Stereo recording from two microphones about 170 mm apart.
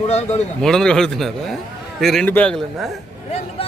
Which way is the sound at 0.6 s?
5° left (ahead or behind).